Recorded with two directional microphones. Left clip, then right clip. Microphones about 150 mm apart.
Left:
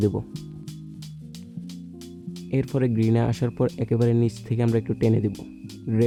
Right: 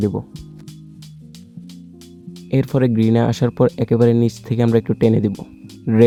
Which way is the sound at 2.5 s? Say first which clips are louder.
Right 7 dB; 25° right (ahead or behind).